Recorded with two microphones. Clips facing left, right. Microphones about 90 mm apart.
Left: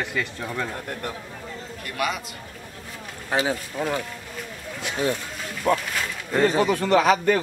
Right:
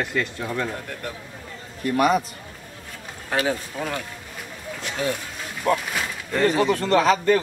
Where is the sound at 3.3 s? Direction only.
15° left (ahead or behind).